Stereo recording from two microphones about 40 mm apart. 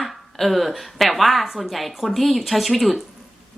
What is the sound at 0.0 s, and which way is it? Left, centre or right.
Speech, centre.